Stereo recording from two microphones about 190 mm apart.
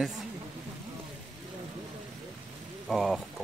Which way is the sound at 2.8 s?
Centre (ahead or behind).